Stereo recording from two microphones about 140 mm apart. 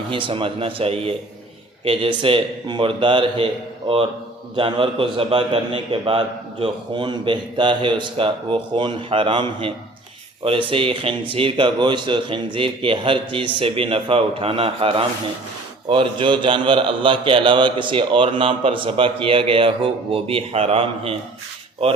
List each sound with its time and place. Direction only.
0.1 s a man's voice: 40° right (ahead or behind)